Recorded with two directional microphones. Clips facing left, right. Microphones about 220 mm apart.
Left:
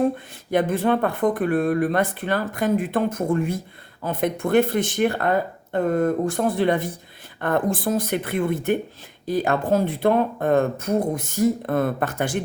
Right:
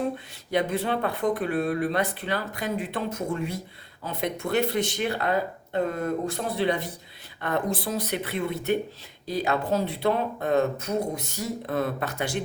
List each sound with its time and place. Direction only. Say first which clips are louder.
0.5 s speech: left 5 dB; 50° left (ahead or behind)